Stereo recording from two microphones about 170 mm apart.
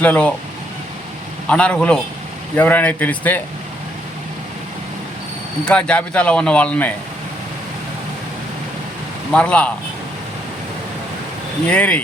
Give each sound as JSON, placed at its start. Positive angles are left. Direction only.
{"t": 0.0, "sound": "speech", "side_deg": 10}
{"t": 1.5, "sound": "speech", "side_deg": 5}
{"t": 5.6, "sound": "speech", "side_deg": 5}
{"t": 9.3, "sound": "speech", "side_deg": 5}
{"t": 11.6, "sound": "speech", "side_deg": 5}